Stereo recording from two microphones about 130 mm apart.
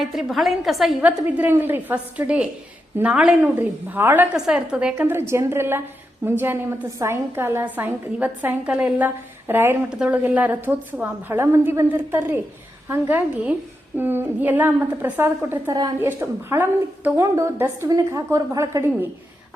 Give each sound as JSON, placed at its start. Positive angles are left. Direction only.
{"t": 0.0, "sound": "a woman's voice", "side_deg": 0}
{"t": 1.4, "sound": "a woman's voice", "side_deg": -15}
{"t": 4.9, "sound": "a woman's voice", "side_deg": -20}